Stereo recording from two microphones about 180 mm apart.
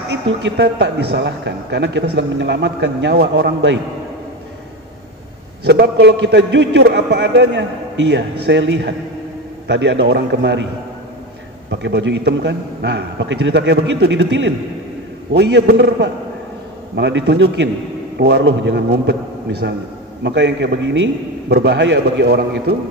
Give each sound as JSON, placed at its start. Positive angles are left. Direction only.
{"t": 0.1, "sound": "a man's voice", "side_deg": -70}
{"t": 5.7, "sound": "a man's voice", "side_deg": -65}
{"t": 11.7, "sound": "a man's voice", "side_deg": -75}